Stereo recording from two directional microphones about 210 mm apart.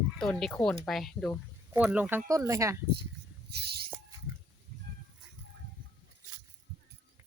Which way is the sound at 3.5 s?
50° right (ahead or behind).